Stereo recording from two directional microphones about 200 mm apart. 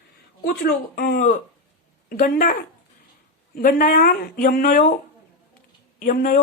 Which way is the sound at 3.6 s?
45° left (ahead or behind).